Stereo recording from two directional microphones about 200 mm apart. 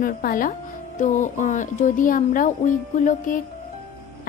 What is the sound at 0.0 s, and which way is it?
A woman's voice, 45° left (ahead or behind).